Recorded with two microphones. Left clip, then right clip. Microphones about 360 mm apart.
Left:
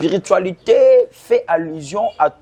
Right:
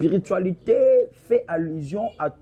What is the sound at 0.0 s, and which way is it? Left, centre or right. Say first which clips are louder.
A man's voice: left 7 dB; left.